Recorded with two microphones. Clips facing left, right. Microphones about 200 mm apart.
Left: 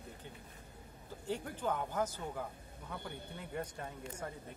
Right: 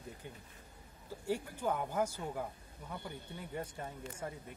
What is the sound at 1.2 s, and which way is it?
Speech, 10° right (ahead or behind).